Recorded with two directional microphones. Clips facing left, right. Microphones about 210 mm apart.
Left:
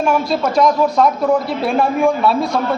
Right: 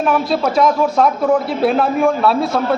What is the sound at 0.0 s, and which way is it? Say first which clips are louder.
A man's voice: even; centre (ahead or behind).